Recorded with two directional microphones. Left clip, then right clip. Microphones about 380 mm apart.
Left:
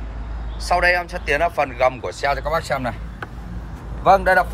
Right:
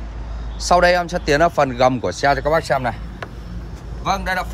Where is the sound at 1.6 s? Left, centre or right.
Right.